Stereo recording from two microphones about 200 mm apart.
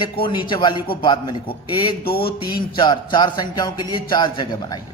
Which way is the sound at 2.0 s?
50° left (ahead or behind).